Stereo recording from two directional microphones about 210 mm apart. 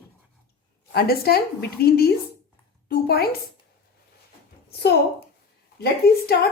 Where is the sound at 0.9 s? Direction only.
45° left (ahead or behind).